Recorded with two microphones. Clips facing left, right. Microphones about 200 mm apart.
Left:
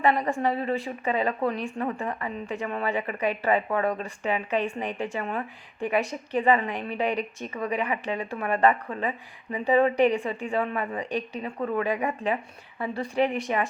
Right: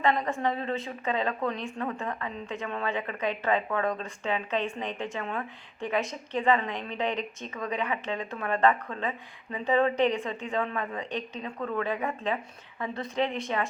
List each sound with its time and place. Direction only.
0.0 s speech: 10° left (ahead or behind)